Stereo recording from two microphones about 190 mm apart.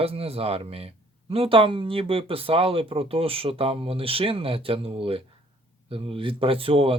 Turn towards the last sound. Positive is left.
turn(degrees=-30)  # may be behind; listen again after turning